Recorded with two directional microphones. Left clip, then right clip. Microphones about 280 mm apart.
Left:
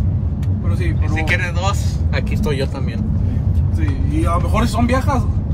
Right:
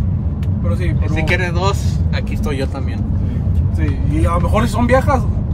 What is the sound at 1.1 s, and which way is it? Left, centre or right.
Speech, centre.